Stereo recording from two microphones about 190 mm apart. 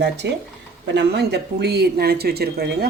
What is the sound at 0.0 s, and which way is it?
Speech, 65° right (ahead or behind).